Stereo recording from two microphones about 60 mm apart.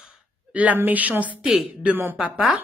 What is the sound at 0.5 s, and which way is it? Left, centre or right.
A woman's voice, right.